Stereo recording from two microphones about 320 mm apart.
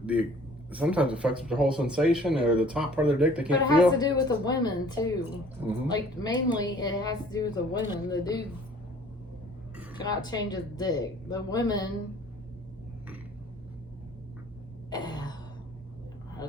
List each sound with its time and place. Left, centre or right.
0.0 s a man's voice: centre
3.9 s speech: centre
9.7 s a sound: centre
10.0 s speech: centre
14.8 s cough: centre